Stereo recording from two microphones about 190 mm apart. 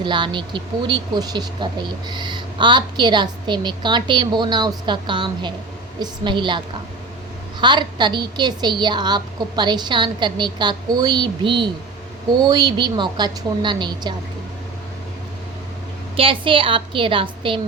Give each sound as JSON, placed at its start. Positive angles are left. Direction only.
{"t": 0.0, "sound": "speech", "side_deg": -25}
{"t": 7.6, "sound": "speech", "side_deg": -25}
{"t": 16.1, "sound": "speech", "side_deg": -25}